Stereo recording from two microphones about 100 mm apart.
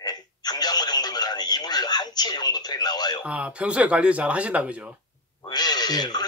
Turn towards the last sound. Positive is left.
turn(degrees=45)  # may be behind; listen again after turning